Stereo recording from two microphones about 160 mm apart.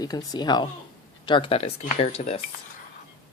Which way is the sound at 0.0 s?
25° left (ahead or behind).